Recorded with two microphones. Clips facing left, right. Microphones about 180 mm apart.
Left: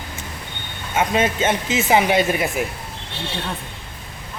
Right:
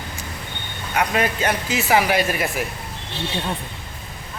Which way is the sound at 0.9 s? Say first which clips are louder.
Left 2 dB; 20° left (ahead or behind).